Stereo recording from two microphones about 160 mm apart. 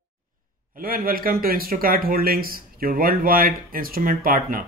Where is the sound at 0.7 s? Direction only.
65° right (ahead or behind).